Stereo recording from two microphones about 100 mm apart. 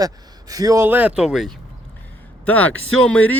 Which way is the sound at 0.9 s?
15° right (ahead or behind).